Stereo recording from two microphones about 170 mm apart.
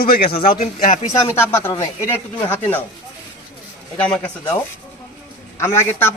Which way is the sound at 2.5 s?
10° left (ahead or behind).